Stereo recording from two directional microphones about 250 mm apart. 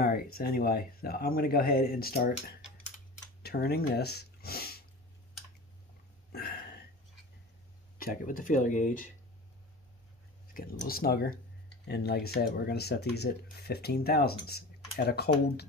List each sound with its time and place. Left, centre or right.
0.0 s speech: left
6.3 s a sound: left
8.0 s speech: left
10.5 s speech: left